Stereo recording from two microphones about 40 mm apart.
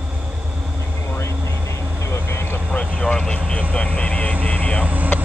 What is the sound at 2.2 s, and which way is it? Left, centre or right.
Vehicle, left.